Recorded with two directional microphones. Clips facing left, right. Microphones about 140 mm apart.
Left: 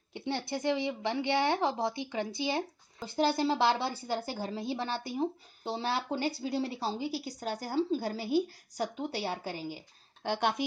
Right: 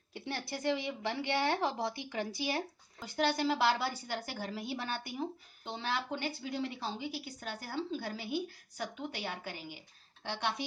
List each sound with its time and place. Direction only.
0.1 s a woman's voice: 20° left (ahead or behind)
10.2 s a woman's voice: 50° left (ahead or behind)